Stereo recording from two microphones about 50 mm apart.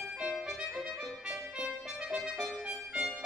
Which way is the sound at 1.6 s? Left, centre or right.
Centre.